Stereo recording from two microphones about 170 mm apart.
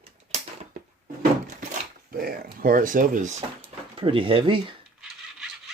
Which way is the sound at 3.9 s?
30° right (ahead or behind).